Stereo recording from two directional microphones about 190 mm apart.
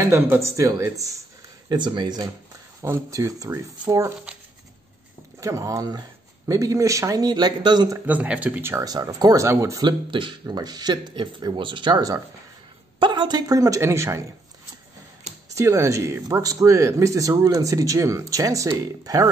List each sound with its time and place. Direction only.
0.0 s speech: 15° right (ahead or behind)
5.4 s speech: 15° right (ahead or behind)
8.1 s speech: 10° right (ahead or behind)
15.5 s speech: 15° right (ahead or behind)